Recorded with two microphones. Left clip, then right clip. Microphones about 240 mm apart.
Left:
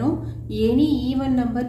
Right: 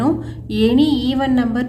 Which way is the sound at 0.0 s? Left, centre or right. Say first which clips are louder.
Right 5 dB; right.